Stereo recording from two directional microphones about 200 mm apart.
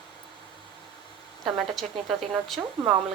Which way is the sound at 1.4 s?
Centre (ahead or behind).